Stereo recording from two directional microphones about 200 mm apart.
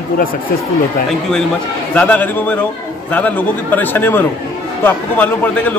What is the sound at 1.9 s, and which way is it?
A man's voice, 10° left (ahead or behind).